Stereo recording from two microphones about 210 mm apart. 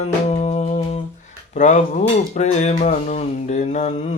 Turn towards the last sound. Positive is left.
turn(degrees=35)  # may be behind; listen again after turning